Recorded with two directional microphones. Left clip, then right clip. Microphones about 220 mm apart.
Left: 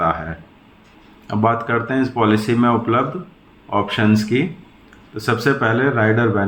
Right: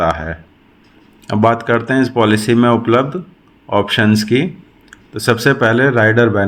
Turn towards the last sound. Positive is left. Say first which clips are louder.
# right 5 dB
turn(degrees=-50)  # may be behind; listen again after turning